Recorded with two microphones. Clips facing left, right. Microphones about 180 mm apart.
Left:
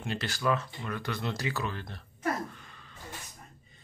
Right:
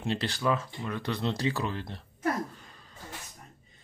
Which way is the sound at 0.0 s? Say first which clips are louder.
Right 2 dB; 30° right (ahead or behind).